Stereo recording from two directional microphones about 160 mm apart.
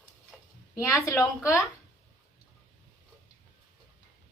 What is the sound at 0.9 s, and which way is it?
Speech, 15° left (ahead or behind).